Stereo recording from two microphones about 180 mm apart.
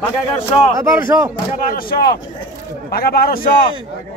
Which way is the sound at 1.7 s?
55° left (ahead or behind).